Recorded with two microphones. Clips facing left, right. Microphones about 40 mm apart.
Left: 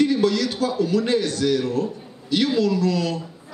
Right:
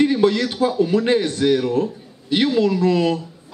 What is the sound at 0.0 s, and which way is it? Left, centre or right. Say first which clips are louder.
A man's voice: right 3 dB; right.